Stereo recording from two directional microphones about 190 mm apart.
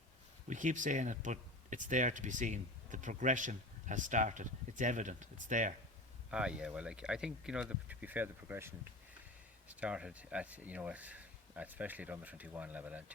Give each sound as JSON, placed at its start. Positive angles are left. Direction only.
{"t": 0.4, "sound": "speech", "side_deg": -40}
{"t": 6.3, "sound": "speech", "side_deg": -5}